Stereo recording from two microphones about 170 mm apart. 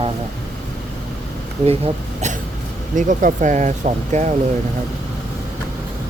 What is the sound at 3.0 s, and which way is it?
Speech, 50° right (ahead or behind).